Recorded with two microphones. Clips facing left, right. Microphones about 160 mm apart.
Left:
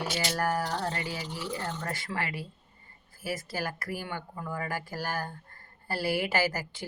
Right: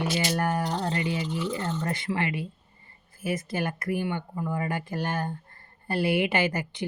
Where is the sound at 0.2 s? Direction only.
20° right (ahead or behind).